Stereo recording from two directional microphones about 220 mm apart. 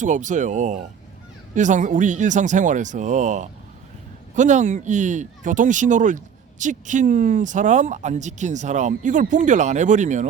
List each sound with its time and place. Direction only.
0.0 s speech: 35° right (ahead or behind)